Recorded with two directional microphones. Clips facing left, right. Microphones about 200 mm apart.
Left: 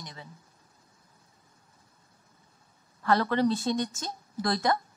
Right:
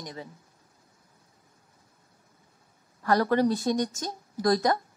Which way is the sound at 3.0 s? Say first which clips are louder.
Right 2 dB; 40° right (ahead or behind).